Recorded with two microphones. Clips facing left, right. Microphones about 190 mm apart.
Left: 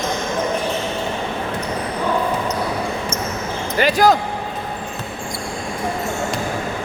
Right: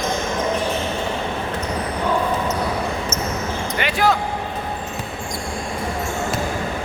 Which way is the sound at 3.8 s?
40° left (ahead or behind).